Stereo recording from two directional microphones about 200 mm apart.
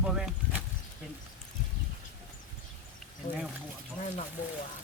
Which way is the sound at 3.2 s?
40° left (ahead or behind).